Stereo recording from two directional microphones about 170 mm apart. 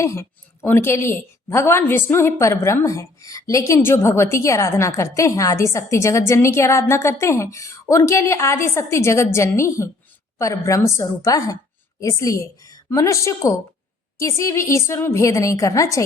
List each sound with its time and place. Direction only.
0.0 s a woman's voice: 15° left (ahead or behind)